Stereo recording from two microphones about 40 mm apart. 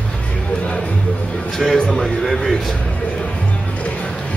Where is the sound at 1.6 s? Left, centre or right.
Centre.